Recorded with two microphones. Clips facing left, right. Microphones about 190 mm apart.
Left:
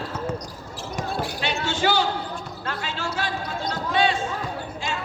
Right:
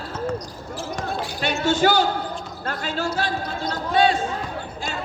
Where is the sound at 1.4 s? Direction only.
40° right (ahead or behind).